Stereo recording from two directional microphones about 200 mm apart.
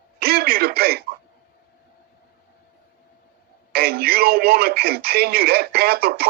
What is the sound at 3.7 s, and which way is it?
Speech, 50° right (ahead or behind).